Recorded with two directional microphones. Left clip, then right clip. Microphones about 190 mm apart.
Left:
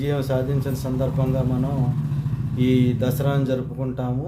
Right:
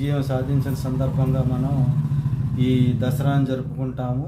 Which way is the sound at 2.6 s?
25° left (ahead or behind).